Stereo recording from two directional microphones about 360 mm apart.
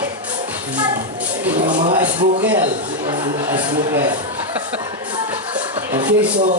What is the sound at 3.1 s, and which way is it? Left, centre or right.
Speech, centre.